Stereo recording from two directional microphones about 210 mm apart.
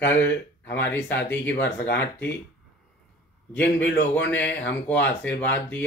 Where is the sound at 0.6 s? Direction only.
55° left (ahead or behind).